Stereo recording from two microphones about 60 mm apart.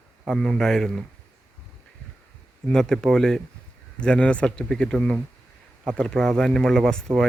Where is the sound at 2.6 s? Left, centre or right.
Centre.